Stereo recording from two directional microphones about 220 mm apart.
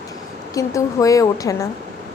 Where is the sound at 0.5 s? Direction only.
15° left (ahead or behind).